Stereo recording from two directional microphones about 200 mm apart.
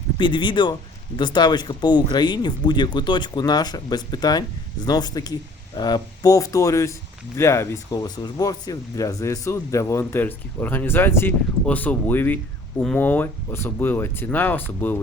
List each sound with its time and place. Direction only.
0.2 s speech: 25° left (ahead or behind)